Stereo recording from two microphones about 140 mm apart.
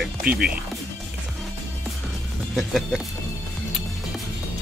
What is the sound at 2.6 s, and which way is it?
Speech, centre (ahead or behind).